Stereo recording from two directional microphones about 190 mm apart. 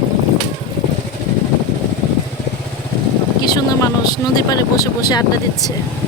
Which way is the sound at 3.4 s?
20° left (ahead or behind).